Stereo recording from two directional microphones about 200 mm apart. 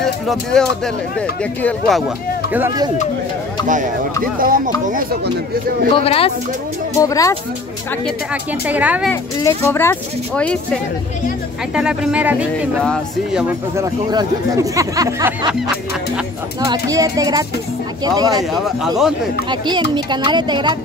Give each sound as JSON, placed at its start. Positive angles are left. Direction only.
{"t": 0.0, "sound": "speech", "side_deg": 0}
{"t": 3.6, "sound": "speech", "side_deg": -40}
{"t": 5.9, "sound": "speech", "side_deg": 30}
{"t": 7.0, "sound": "speech", "side_deg": 15}
{"t": 8.3, "sound": "speech", "side_deg": -5}
{"t": 9.1, "sound": "speech", "side_deg": 15}
{"t": 13.7, "sound": "speech", "side_deg": -15}
{"t": 19.5, "sound": "speech", "side_deg": -20}